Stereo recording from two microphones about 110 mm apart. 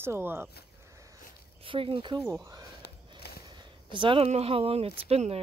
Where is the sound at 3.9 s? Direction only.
50° right (ahead or behind); by 5.4 s 70° right (ahead or behind).